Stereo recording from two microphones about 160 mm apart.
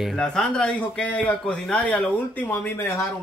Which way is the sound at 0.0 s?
5° left (ahead or behind).